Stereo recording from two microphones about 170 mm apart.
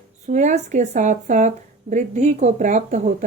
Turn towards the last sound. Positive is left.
turn(degrees=-45)  # may be behind; listen again after turning